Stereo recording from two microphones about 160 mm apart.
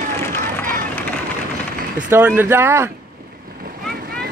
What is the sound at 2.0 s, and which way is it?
Speech, 10° right (ahead or behind).